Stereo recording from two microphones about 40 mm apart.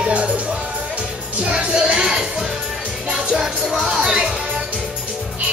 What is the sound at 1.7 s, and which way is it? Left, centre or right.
Music, right.